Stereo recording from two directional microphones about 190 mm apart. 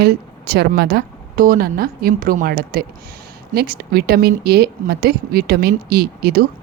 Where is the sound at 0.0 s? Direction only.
55° right (ahead or behind).